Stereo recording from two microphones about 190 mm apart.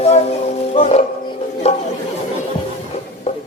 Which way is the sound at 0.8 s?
35° left (ahead or behind).